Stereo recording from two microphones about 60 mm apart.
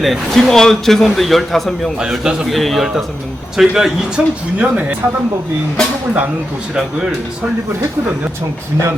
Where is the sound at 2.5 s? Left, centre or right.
Centre; by 4.9 s right.